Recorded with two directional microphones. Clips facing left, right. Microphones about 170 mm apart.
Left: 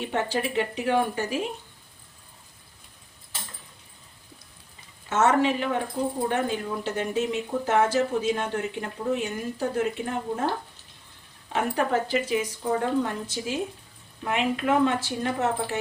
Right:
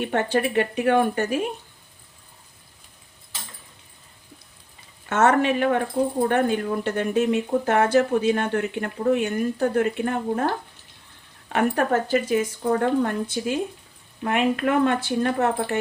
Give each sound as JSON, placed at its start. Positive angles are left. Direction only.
{"t": 0.0, "sound": "speech", "side_deg": -60}
{"t": 5.0, "sound": "speech", "side_deg": -60}
{"t": 11.5, "sound": "speech", "side_deg": -50}